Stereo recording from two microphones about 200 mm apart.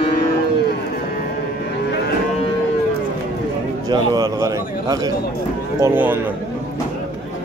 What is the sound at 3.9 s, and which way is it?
Speech, 20° right (ahead or behind).